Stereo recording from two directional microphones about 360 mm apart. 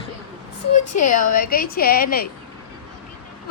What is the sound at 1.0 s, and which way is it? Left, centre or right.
A woman's voice, left.